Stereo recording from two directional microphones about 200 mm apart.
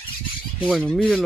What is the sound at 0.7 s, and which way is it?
Speech, 5° right (ahead or behind).